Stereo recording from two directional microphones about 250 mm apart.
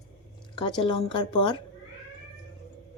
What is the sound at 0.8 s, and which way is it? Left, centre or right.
Speech, centre.